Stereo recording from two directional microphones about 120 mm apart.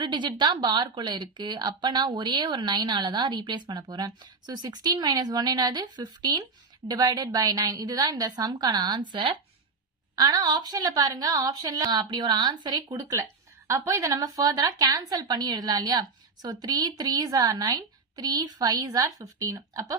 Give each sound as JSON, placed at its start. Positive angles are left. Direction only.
{"t": 0.0, "sound": "a woman's voice", "side_deg": -40}